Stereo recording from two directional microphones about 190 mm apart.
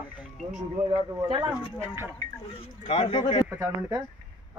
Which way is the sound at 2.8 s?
25° left (ahead or behind).